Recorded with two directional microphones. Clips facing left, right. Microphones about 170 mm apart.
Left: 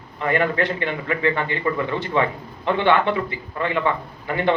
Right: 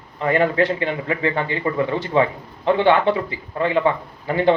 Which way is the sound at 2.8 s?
35° right (ahead or behind).